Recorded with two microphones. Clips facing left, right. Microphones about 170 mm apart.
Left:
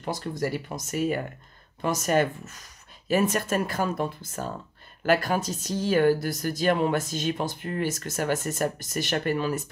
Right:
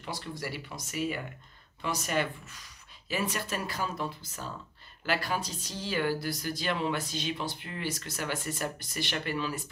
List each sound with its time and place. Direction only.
0.0 s speech: 45° left (ahead or behind)